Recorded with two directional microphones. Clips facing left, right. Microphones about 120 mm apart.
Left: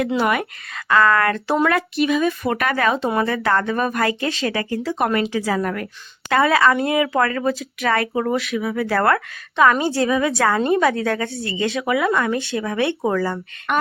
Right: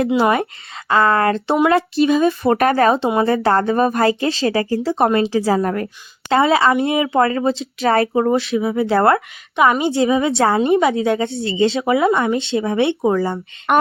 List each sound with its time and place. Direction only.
0.2 s speech: 30° right (ahead or behind)
13.7 s speech: 45° right (ahead or behind)